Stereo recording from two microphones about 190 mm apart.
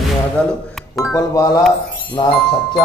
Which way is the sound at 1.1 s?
15° left (ahead or behind).